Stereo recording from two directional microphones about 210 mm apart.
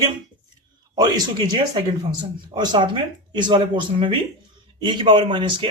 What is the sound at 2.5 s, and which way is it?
Speech, 20° right (ahead or behind).